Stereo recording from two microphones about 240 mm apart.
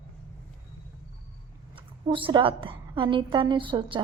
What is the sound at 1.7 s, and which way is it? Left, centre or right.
A woman's voice, right.